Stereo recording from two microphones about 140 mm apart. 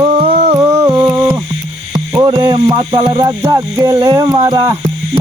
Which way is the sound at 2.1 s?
30° right (ahead or behind).